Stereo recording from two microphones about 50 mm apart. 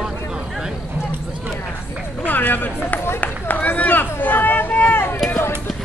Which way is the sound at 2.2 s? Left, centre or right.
Left.